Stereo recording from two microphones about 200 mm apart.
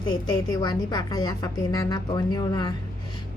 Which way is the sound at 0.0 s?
20° left (ahead or behind).